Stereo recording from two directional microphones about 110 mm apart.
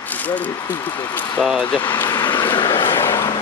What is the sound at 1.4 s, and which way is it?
Speech, centre (ahead or behind).